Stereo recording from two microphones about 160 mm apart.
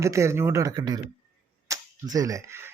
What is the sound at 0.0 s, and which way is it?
Speech, 20° right (ahead or behind).